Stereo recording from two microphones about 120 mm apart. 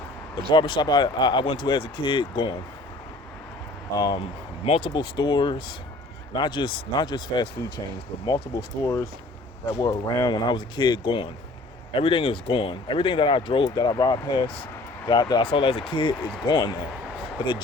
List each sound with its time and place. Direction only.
0.5 s speech: 40° left (ahead or behind)
3.9 s speech: 30° left (ahead or behind)
4.6 s speech: 55° left (ahead or behind)
4.9 s speech: 40° left (ahead or behind)
13.7 s speech: 30° left (ahead or behind)